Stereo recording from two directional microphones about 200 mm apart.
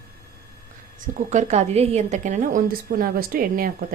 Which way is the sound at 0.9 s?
40° right (ahead or behind).